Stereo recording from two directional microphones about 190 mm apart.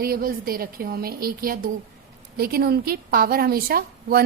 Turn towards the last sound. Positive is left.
turn(degrees=-50)  # may be behind; listen again after turning